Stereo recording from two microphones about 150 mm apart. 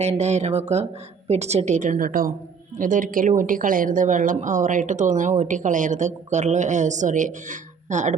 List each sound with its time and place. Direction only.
0.0 s a woman's voice: 45° right (ahead or behind)